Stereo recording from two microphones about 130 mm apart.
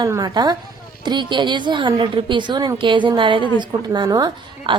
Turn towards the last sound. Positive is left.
turn(degrees=-30)  # may be behind; listen again after turning